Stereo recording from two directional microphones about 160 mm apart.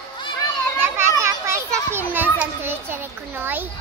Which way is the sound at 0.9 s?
15° right (ahead or behind).